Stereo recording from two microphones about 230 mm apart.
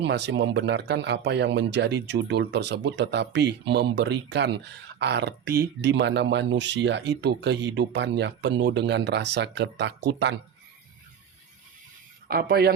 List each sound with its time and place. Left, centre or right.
0.0 s speech: right
12.3 s speech: right